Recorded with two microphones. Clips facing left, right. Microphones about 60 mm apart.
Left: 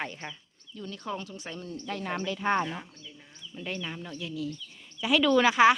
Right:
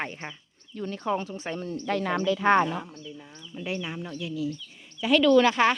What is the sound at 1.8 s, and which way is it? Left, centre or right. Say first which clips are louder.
Speech: right 6 dB; right.